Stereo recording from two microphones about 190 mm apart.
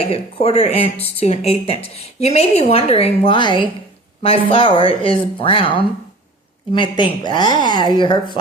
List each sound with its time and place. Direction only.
0.1 s speech: 30° left (ahead or behind)